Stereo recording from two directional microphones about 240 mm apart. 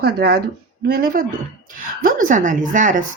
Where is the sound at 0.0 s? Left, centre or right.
Right.